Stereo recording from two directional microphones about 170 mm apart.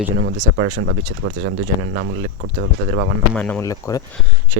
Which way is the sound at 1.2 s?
85° right.